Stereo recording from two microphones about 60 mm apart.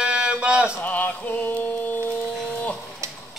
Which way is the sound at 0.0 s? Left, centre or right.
Centre.